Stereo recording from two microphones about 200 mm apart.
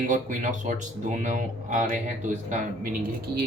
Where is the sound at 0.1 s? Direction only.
40° right (ahead or behind).